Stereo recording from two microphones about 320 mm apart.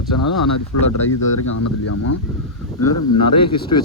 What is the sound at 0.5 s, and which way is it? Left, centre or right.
Speech, left.